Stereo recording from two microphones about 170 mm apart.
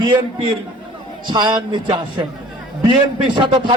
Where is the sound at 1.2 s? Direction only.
25° right (ahead or behind).